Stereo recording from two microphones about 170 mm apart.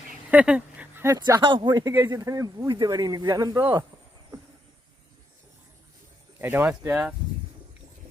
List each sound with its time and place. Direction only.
0.1 s speech: 5° right (ahead or behind)
6.4 s speech: 10° right (ahead or behind)